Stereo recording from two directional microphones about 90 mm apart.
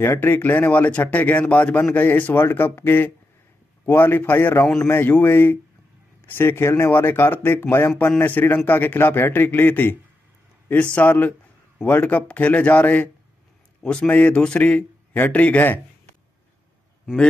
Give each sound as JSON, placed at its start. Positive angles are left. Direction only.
{"t": 0.0, "sound": "a man's voice", "side_deg": 25}
{"t": 17.0, "sound": "a man's voice", "side_deg": 5}